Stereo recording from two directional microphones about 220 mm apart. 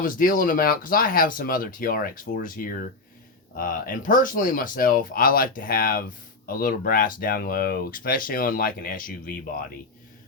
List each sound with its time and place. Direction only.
0.0 s speech: 40° left (ahead or behind)